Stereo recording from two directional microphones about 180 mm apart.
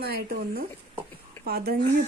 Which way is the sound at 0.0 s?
60° right (ahead or behind).